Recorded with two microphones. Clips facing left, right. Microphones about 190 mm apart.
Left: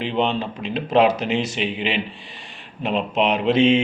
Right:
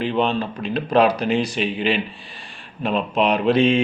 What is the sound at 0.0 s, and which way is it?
Mantra, 20° left (ahead or behind).